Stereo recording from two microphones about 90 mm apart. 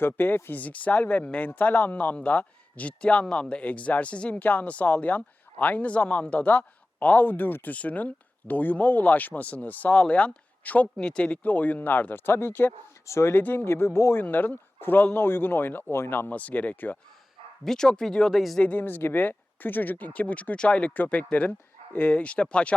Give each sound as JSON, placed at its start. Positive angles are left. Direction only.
{"t": 0.0, "sound": "a man's voice", "side_deg": 25}
{"t": 17.6, "sound": "speech", "side_deg": 5}
{"t": 18.6, "sound": "speech", "side_deg": 20}